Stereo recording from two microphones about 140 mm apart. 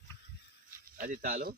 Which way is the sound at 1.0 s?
90° right.